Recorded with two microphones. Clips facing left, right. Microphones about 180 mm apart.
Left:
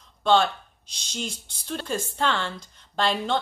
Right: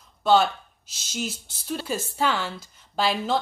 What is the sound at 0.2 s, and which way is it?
A woman's voice, 5° right (ahead or behind).